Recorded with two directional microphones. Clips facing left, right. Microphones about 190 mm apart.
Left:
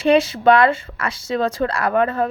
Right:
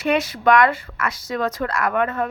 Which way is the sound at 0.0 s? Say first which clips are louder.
Left 5 dB; 30° left (ahead or behind).